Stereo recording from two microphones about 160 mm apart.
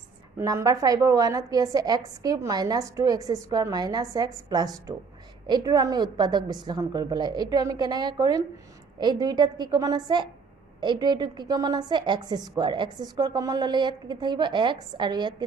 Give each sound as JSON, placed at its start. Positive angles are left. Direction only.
{"t": 0.3, "sound": "a woman's voice", "side_deg": -20}